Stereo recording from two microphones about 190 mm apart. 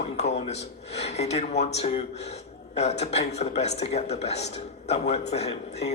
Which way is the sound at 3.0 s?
35° left (ahead or behind).